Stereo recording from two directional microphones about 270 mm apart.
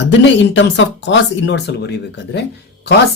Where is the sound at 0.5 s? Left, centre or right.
Left.